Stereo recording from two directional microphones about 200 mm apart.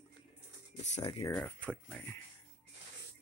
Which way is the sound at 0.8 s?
35° left (ahead or behind).